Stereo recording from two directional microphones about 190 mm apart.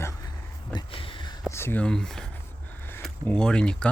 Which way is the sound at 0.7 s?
25° left (ahead or behind).